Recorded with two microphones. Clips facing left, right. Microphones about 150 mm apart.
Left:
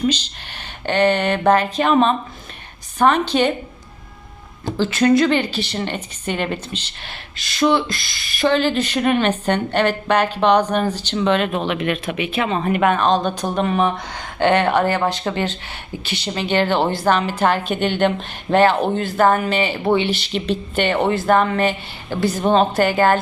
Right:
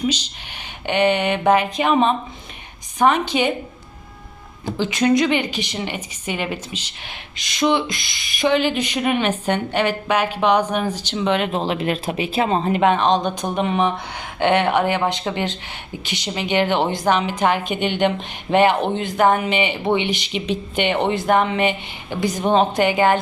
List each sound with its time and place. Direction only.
0.0 s speech: 10° right (ahead or behind)
4.8 s speech: 20° right (ahead or behind)
11.6 s speech: 30° right (ahead or behind)